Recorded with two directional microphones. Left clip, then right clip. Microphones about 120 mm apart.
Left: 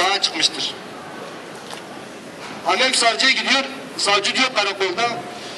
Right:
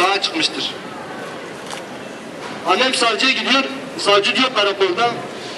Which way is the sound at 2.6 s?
15° left (ahead or behind).